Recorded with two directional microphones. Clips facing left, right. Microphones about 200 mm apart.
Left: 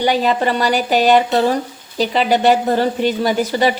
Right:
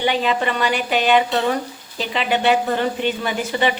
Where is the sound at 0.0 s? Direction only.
40° left (ahead or behind).